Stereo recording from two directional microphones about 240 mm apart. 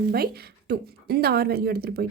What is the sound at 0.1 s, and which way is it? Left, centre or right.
A woman's voice, right.